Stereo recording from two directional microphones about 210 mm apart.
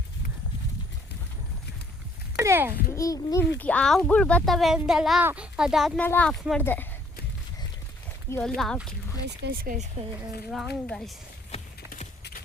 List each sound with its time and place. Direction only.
2.3 s speech: 10° right (ahead or behind)
2.9 s speech: 15° left (ahead or behind)
8.3 s speech: 5° left (ahead or behind)
9.2 s speech: 50° right (ahead or behind)
10.0 s speech: 30° right (ahead or behind)
10.8 s speech: 5° left (ahead or behind)